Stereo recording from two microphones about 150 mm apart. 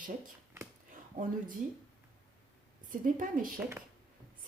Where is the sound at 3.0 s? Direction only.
65° right (ahead or behind).